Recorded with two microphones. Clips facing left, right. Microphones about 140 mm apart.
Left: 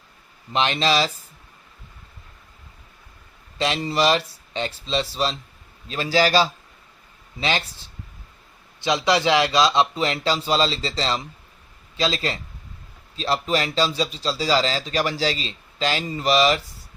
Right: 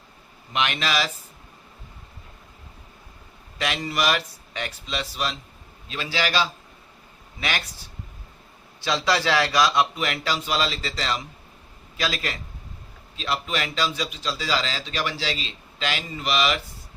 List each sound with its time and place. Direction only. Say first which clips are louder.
0.5 s a man's voice: left 4 dB; 30° left (ahead or behind)
3.6 s a man's voice: left 4 dB; 30° left (ahead or behind)
7.3 s speech: left 5 dB; 25° left (ahead or behind)
8.8 s a man's voice: left 3 dB; 20° left (ahead or behind); by 16.6 s 35° left (ahead or behind)